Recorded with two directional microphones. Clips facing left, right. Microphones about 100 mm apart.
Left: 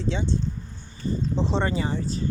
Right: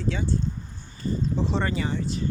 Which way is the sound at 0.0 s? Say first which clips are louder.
Left 1 dB; 25° left (ahead or behind).